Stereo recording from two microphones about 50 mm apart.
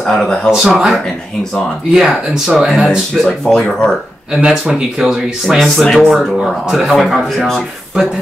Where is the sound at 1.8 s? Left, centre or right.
Centre.